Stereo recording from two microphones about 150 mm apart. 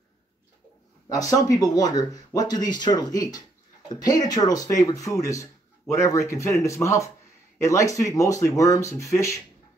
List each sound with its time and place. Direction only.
1.0 s speech: 25° left (ahead or behind)